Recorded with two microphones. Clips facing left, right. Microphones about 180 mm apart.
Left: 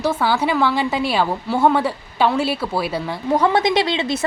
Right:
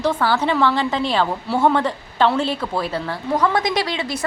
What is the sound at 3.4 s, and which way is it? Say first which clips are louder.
Speech: left 3 dB; 25° left (ahead or behind).